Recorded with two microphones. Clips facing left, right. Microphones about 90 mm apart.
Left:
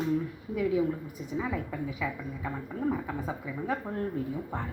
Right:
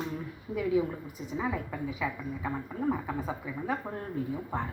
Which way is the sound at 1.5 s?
15° right (ahead or behind).